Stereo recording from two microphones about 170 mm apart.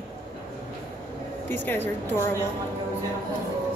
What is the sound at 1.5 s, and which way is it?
Speech, 10° left (ahead or behind).